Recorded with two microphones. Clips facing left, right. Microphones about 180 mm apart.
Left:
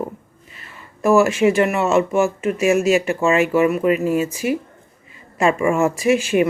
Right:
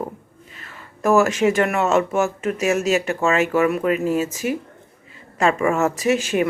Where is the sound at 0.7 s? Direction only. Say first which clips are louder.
Left 2 dB; 10° left (ahead or behind).